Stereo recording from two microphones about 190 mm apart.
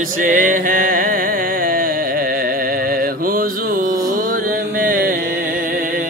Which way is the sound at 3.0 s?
50° right (ahead or behind).